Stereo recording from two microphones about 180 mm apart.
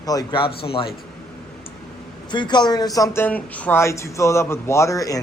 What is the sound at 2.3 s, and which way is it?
A man's voice, 25° left (ahead or behind).